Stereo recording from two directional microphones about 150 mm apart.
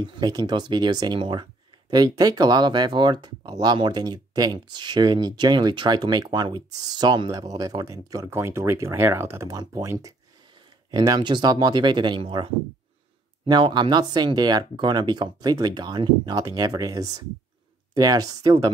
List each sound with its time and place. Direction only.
0.0 s speech: 30° right (ahead or behind)
13.5 s speech: 30° right (ahead or behind)